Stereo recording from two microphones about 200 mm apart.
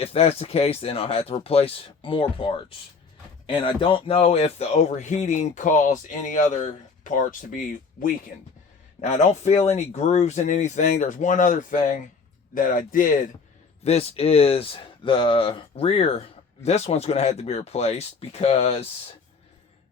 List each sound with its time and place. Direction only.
0.0 s speech: 30° left (ahead or behind)
13.8 s speech: 30° left (ahead or behind)